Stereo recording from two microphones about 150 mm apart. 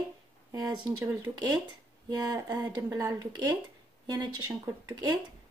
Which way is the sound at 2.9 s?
25° right (ahead or behind).